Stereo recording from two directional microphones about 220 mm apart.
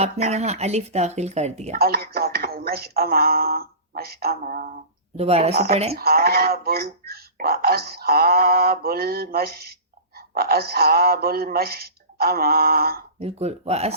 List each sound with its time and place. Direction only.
0.0 s speech: 30° right (ahead or behind)
1.7 s speech: 45° right (ahead or behind)
5.1 s speech: 30° right (ahead or behind)
6.0 s speech: 45° right (ahead or behind)
13.1 s speech: 30° right (ahead or behind)